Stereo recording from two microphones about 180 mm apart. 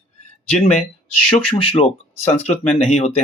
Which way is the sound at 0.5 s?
35° left (ahead or behind).